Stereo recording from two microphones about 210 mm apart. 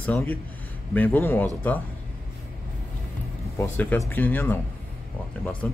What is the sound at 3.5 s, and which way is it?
Speech, 10° left (ahead or behind).